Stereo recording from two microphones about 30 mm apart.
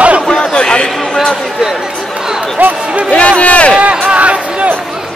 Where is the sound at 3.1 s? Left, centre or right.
Left.